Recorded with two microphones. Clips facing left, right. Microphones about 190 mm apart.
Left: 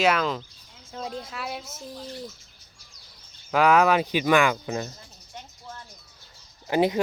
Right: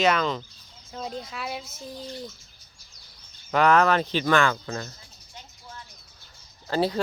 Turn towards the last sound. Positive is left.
turn(degrees=15)  # may be behind; listen again after turning